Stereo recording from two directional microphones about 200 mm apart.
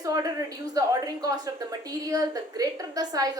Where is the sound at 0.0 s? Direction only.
20° right (ahead or behind).